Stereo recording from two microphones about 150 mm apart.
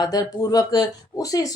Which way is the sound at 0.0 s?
25° left (ahead or behind).